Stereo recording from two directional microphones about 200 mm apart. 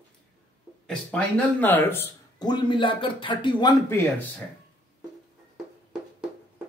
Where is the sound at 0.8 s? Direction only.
5° left (ahead or behind); by 4.0 s 20° left (ahead or behind).